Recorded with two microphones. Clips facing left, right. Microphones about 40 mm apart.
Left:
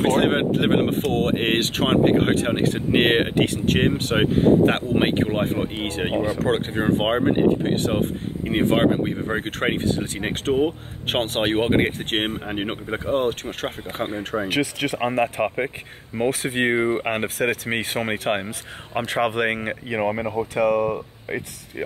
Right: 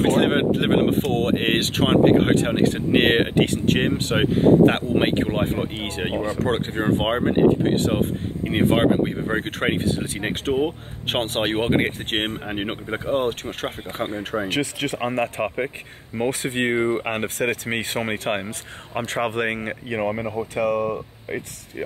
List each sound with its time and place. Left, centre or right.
0.0 s speech: centre